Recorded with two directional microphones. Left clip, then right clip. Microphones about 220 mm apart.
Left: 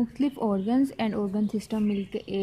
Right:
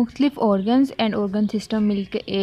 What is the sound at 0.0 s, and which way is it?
A woman's voice, 30° right (ahead or behind).